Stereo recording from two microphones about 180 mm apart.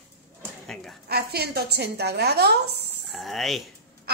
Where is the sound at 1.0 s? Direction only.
60° right (ahead or behind).